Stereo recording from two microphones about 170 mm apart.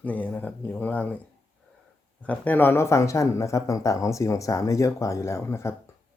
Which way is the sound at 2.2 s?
10° left (ahead or behind).